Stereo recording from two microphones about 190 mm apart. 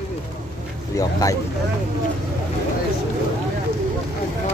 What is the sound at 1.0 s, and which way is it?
Speech, 15° left (ahead or behind).